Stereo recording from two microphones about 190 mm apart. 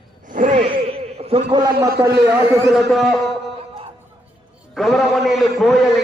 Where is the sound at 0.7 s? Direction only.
30° right (ahead or behind).